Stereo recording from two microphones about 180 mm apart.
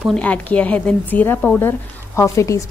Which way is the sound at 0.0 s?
5° left (ahead or behind).